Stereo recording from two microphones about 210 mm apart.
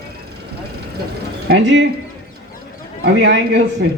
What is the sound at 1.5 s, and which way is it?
Speech, 55° right (ahead or behind).